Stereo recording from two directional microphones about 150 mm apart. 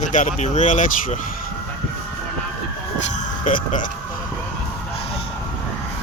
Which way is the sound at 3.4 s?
60° left (ahead or behind).